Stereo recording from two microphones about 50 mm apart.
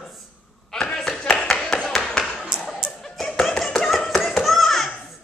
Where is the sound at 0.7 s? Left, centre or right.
Centre.